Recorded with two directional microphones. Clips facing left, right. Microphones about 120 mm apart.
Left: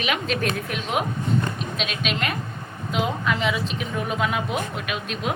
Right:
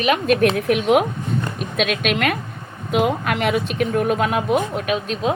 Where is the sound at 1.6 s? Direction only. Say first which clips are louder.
Right 7 dB; 55° right (ahead or behind).